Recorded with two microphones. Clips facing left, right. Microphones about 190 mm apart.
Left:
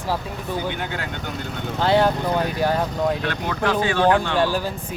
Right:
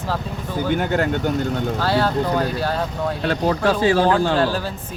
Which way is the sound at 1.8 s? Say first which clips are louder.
Left 3 dB; 20° left (ahead or behind).